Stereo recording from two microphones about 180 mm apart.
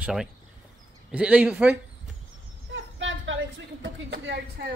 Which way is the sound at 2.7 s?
90° right.